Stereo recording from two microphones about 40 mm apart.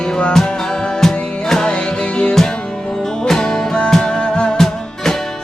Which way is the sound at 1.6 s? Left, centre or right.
Left.